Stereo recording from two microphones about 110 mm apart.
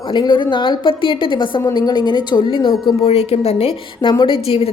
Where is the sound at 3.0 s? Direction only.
65° left (ahead or behind).